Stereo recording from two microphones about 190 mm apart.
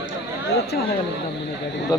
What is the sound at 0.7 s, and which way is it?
Speech, 55° left (ahead or behind).